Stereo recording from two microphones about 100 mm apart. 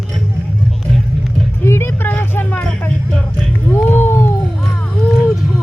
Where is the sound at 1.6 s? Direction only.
25° left (ahead or behind).